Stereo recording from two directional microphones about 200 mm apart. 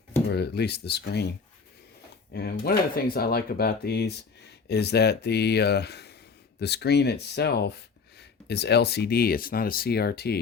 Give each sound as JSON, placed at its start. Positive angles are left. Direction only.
{"t": 0.3, "sound": "speech", "side_deg": 55}
{"t": 2.3, "sound": "speech", "side_deg": 50}